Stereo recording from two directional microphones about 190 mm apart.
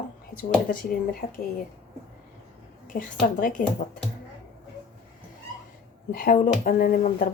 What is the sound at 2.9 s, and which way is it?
Speech, 45° left (ahead or behind).